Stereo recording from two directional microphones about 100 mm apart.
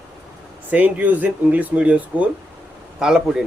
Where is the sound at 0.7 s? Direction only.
15° right (ahead or behind).